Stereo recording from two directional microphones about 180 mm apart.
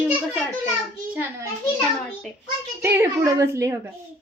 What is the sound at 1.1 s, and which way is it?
Speech, 10° right (ahead or behind).